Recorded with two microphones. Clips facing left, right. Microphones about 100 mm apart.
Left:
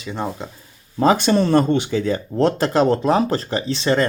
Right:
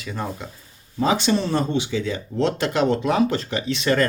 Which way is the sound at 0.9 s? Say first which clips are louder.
Left 4 dB; 45° left (ahead or behind).